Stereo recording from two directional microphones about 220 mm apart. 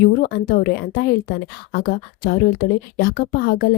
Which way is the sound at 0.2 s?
45° left (ahead or behind).